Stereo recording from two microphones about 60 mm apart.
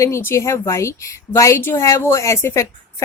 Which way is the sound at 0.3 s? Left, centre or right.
Left.